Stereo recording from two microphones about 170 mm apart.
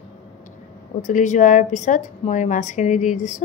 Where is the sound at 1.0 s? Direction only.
45° left (ahead or behind).